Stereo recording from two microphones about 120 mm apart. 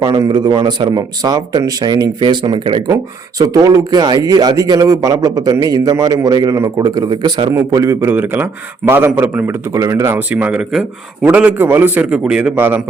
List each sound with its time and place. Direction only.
0.2 s speech: 35° right (ahead or behind)
2.9 s speech: 30° right (ahead or behind)
7.7 s a man's voice: 30° right (ahead or behind)
10.3 s a man's voice: 10° right (ahead or behind)